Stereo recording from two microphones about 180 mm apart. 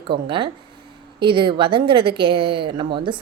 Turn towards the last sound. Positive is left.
turn(degrees=-30)  # may be behind; listen again after turning